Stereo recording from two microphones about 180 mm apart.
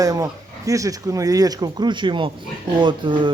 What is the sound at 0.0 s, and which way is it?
Speech, 20° right (ahead or behind).